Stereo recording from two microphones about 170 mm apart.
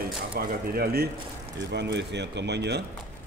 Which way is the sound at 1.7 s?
90° right.